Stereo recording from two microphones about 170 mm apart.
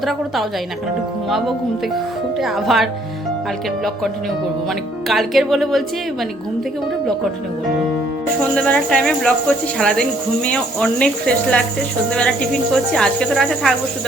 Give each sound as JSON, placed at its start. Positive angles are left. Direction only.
{"t": 0.0, "sound": "speech", "side_deg": 0}
{"t": 2.4, "sound": "speech", "side_deg": 0}
{"t": 5.0, "sound": "speech", "side_deg": 0}
{"t": 8.5, "sound": "speech", "side_deg": 5}
{"t": 12.7, "sound": "speech", "side_deg": 5}